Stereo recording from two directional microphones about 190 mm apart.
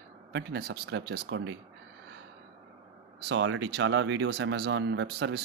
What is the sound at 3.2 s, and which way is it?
Speech, 75° right (ahead or behind).